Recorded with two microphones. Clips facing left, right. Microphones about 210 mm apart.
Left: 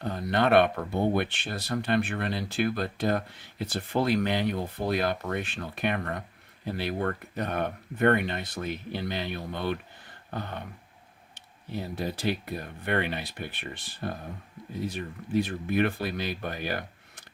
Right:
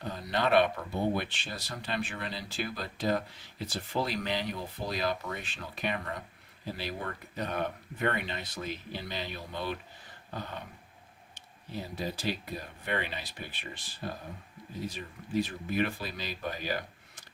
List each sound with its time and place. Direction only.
0.0 s speech: 55° left (ahead or behind)
11.3 s speech: 60° left (ahead or behind)